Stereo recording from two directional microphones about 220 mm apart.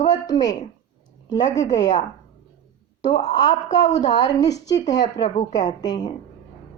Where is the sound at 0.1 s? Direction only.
15° left (ahead or behind).